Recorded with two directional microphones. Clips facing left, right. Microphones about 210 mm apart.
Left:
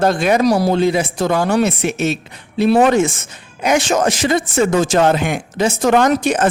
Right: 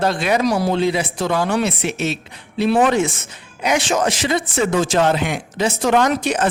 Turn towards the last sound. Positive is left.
turn(degrees=50)  # may be behind; listen again after turning